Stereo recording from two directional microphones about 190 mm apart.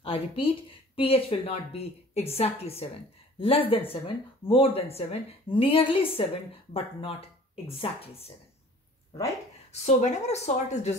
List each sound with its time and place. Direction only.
0.0 s a woman's voice: 30° left (ahead or behind)
9.7 s speech: 35° left (ahead or behind)